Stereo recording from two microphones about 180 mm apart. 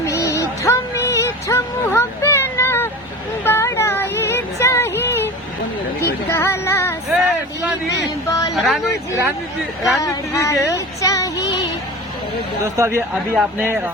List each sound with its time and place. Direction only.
0.0 s music: 15° left (ahead or behind)
3.4 s a sound: 15° left (ahead or behind)
6.3 s child singing: 15° left (ahead or behind)
7.1 s vehicle: 5° right (ahead or behind)
8.3 s a sound: 20° left (ahead or behind)
8.5 s speech: centre (ahead or behind)
10.0 s speech: 15° left (ahead or behind)
12.6 s speech: 15° right (ahead or behind)